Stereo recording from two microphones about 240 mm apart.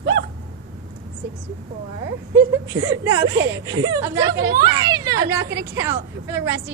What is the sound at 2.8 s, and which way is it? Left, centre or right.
A woman's voice, centre.